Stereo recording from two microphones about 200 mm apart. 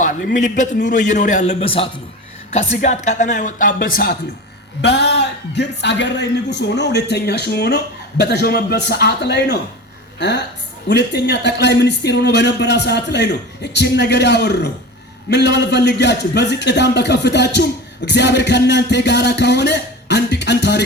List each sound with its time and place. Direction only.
0.0 s a man's voice: 40° left (ahead or behind); by 20.8 s 60° left (ahead or behind)